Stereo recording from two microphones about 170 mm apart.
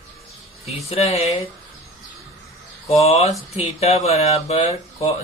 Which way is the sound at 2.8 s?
35° left (ahead or behind).